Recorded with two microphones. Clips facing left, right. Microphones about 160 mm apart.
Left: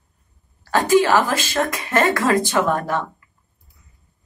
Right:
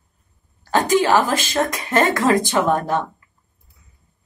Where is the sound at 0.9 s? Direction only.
20° right (ahead or behind).